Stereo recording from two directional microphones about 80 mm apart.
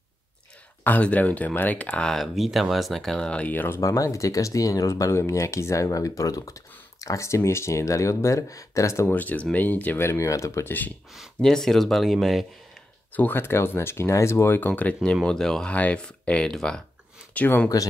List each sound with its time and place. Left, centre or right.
0.8 s speech: centre
3.8 s speech: left
9.0 s speech: left
9.9 s speech: left
11.4 s speech: centre
13.1 s speech: left
14.7 s speech: centre
15.2 s speech: centre